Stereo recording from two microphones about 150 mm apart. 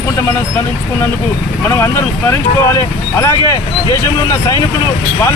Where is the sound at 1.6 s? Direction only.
15° left (ahead or behind).